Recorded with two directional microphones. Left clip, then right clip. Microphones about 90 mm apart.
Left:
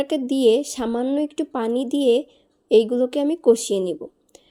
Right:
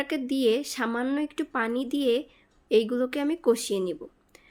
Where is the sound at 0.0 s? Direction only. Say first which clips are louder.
Left 7 dB; 30° left (ahead or behind).